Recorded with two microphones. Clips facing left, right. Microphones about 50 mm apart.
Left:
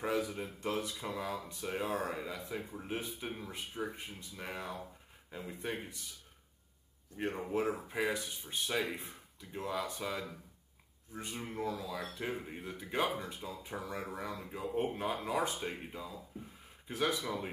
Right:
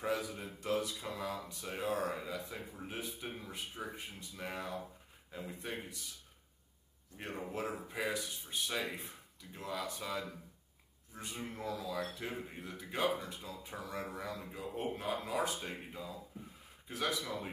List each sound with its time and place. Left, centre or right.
0.0 s speech: centre
0.8 s speech: centre
7.2 s speech: centre